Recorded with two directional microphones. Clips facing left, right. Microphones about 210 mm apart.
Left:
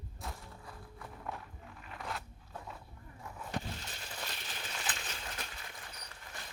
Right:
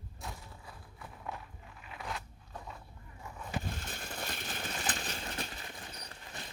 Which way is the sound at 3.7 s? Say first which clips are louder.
Right 3 dB; 50° right (ahead or behind).